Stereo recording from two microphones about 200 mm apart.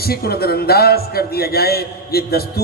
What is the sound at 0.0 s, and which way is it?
A man's voice, 50° left (ahead or behind).